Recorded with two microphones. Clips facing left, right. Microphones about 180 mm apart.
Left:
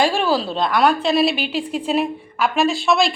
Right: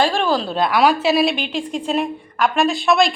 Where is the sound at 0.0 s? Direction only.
5° left (ahead or behind).